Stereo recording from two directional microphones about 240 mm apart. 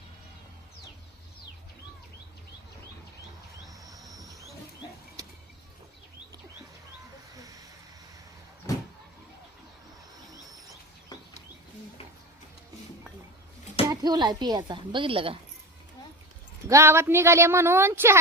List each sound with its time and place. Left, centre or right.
4.1 s a sound: centre
7.3 s vehicle: centre
11.1 s bird: centre
13.9 s speech: centre
16.6 s speech: centre